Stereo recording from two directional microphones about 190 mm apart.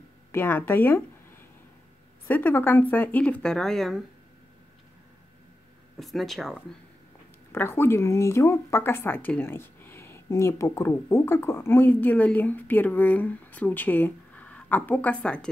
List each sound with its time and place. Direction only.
0.3 s speech: 10° left (ahead or behind)
2.2 s speech: 10° left (ahead or behind)
5.9 s speech: centre (ahead or behind)
7.5 s speech: 10° left (ahead or behind)